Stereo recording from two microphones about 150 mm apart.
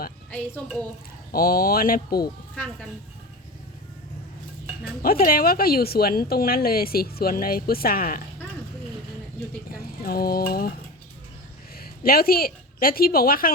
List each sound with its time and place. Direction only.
1.3 s speech: 75° left (ahead or behind)
5.0 s a woman's voice: 75° left (ahead or behind)
10.0 s a woman's voice: 80° left
11.8 s a woman's voice: 85° left